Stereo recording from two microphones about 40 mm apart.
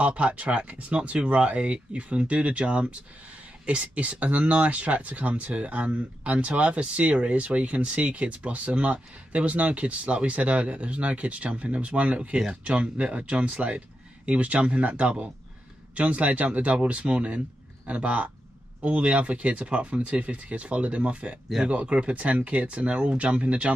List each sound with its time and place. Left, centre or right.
0.0 s speech: right
12.4 s speech: centre
12.7 s speech: right